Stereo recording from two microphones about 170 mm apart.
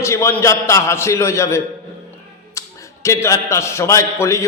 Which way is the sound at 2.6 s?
15° left (ahead or behind).